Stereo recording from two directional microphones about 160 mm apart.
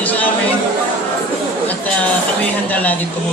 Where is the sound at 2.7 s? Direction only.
10° left (ahead or behind).